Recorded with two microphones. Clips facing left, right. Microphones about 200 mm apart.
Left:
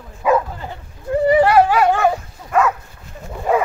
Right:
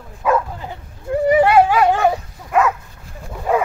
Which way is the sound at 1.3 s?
10° right (ahead or behind).